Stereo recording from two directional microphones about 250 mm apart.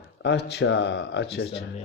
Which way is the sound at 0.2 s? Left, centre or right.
Left.